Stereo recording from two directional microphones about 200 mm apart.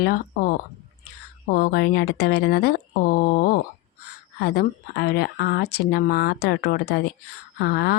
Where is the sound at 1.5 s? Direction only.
50° left (ahead or behind).